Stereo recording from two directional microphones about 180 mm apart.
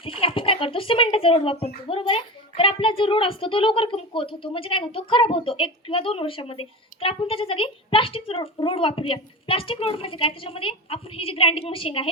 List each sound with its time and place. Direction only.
0.0 s speech: 30° left (ahead or behind)